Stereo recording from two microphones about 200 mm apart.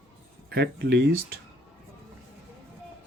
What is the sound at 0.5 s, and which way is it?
Speech, 55° right (ahead or behind).